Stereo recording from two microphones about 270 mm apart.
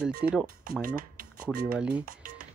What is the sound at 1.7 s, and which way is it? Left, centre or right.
Speech, centre.